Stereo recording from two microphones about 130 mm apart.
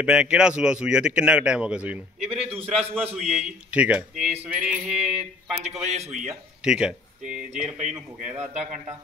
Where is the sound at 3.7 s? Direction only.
10° right (ahead or behind).